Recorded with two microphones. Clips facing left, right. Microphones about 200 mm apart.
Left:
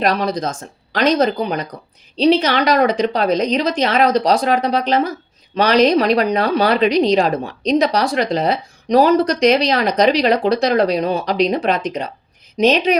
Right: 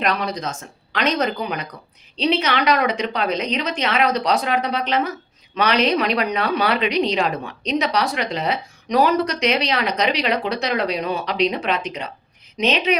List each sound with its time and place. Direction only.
0.0 s speech: 40° left (ahead or behind)